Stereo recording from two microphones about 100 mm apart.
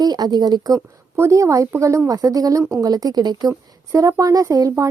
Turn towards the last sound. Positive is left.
turn(degrees=-35)  # may be behind; listen again after turning